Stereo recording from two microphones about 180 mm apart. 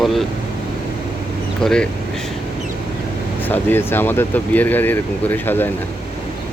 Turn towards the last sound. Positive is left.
turn(degrees=10)  # may be behind; listen again after turning